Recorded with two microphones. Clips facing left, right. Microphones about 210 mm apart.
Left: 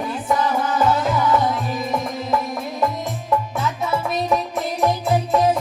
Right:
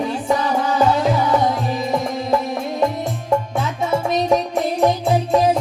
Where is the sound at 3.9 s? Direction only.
30° right (ahead or behind).